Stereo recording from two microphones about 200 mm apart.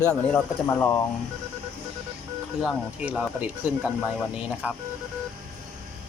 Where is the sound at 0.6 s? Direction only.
10° left (ahead or behind).